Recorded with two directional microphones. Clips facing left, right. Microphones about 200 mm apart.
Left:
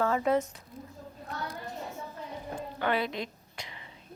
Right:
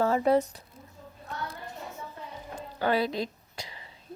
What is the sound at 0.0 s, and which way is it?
Speech, 35° right (ahead or behind).